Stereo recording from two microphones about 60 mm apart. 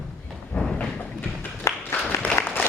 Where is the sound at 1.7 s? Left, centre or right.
Left.